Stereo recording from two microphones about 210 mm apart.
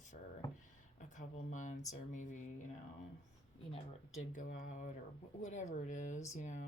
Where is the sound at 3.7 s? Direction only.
35° left (ahead or behind).